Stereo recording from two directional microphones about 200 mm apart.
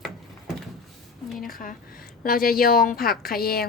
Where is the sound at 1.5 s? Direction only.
45° left (ahead or behind).